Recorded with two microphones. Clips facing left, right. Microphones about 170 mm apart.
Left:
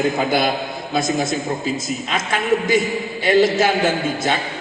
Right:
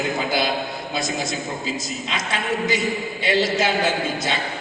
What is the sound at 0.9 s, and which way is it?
A man's voice, 50° left (ahead or behind).